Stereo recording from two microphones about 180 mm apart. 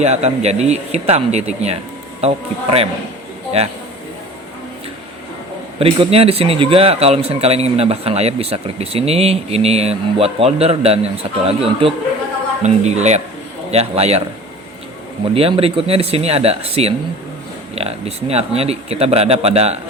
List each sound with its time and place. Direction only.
0.0 s a man's voice: 35° right (ahead or behind)
5.8 s a man's voice: 30° right (ahead or behind)
15.4 s a man's voice: 30° right (ahead or behind)